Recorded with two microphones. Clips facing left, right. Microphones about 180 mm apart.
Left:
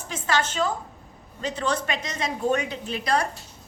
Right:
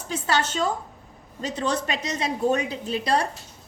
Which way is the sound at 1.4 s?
40° right (ahead or behind).